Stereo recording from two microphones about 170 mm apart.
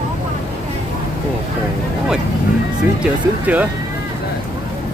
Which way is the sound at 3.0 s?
10° right (ahead or behind).